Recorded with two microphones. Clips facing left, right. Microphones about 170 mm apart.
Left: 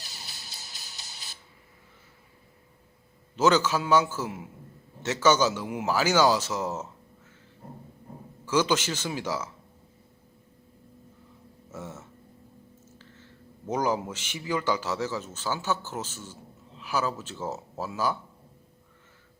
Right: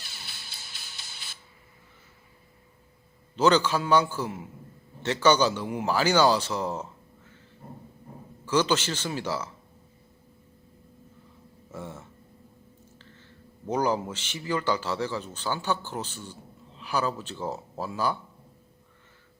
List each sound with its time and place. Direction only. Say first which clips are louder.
0.0 s music: left 1 dB; 40° left (ahead or behind)
3.3 s a man's voice: right 1 dB; 5° left (ahead or behind)
8.4 s a man's voice: even; 10° left (ahead or behind)
11.7 s a sound: right 1 dB; 5° left (ahead or behind)
13.7 s a man's voice: right 1 dB; 5° left (ahead or behind)